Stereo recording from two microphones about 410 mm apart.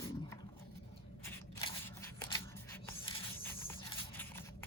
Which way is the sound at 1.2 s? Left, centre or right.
Centre.